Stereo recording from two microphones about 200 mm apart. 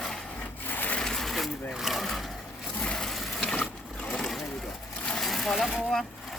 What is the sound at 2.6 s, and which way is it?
Sewing machine, 5° left (ahead or behind).